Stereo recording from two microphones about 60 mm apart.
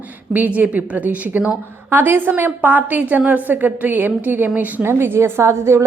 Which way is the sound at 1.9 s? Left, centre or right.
Right.